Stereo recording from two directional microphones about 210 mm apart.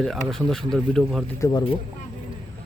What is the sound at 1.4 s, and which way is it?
Speech, 20° left (ahead or behind).